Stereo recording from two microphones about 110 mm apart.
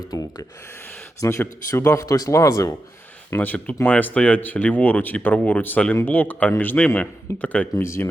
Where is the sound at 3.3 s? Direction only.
15° left (ahead or behind).